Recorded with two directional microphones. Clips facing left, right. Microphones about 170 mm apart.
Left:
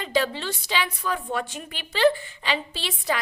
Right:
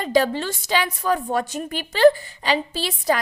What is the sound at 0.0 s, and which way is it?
A woman's voice, 45° right (ahead or behind).